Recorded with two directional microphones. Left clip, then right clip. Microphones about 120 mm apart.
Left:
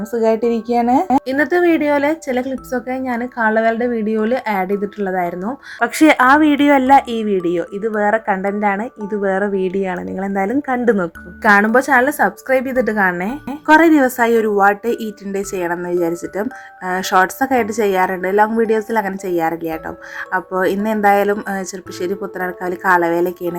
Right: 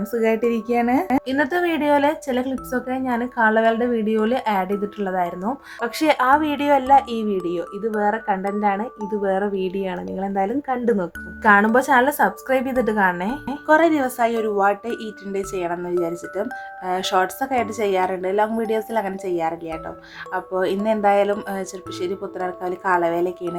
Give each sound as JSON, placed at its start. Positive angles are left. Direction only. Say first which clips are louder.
{"t": 0.0, "sound": "a woman's voice", "louder": "left 4 dB", "side_deg": 20}
{"t": 5.8, "sound": "speech", "louder": "left 7 dB", "side_deg": 55}